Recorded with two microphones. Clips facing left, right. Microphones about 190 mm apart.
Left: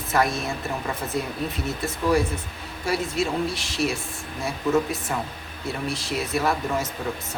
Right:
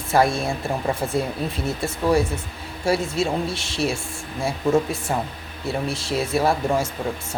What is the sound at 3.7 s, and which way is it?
Speech, 25° right (ahead or behind).